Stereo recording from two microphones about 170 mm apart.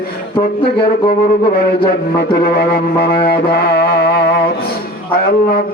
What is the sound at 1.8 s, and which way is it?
Speech, 65° left (ahead or behind).